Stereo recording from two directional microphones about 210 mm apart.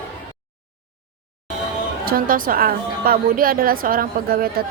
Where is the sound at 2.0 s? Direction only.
45° right (ahead or behind).